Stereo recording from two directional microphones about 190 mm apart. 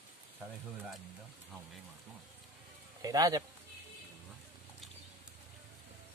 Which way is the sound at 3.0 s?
20° right (ahead or behind).